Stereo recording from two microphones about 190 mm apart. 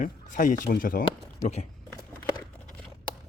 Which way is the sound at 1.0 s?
35° left (ahead or behind).